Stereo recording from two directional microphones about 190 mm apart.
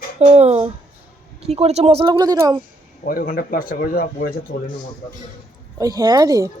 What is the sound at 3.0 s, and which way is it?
Speech, 50° left (ahead or behind).